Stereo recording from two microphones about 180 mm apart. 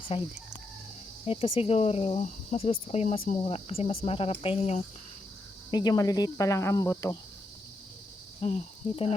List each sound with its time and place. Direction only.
0.1 s speech: 30° left (ahead or behind)
5.7 s speech: 20° left (ahead or behind)
8.4 s speech: 35° left (ahead or behind)